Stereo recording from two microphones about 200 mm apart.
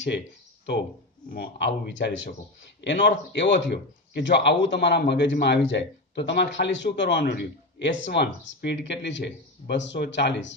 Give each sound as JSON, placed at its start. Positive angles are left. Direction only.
{"t": 1.3, "sound": "speech", "side_deg": 55}